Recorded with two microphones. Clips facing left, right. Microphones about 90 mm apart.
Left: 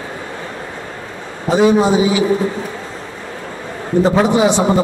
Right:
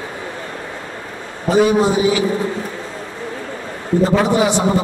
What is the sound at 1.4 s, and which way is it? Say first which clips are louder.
Speech: left 1 dB; 20° left (ahead or behind).